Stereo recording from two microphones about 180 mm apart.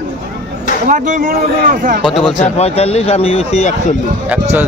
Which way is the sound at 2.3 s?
40° left (ahead or behind).